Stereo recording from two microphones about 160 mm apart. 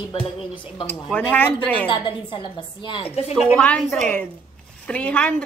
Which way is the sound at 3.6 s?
5° left (ahead or behind).